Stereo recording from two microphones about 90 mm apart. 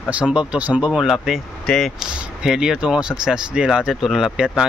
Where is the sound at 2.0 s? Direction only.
5° right (ahead or behind).